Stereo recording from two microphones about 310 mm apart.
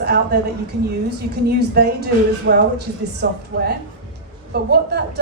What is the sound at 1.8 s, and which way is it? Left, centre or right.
A woman's voice, right.